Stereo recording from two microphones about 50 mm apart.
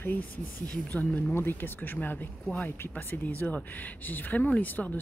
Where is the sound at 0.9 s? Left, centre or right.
Left.